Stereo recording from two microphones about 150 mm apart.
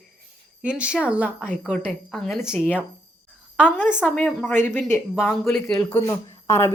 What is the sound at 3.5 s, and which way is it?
Speech, 10° left (ahead or behind).